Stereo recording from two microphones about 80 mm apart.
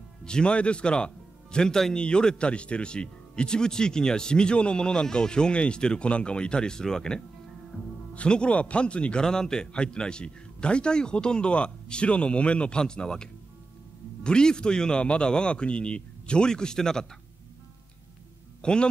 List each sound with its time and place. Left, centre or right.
0.2 s speech: centre
18.6 s a man's voice: centre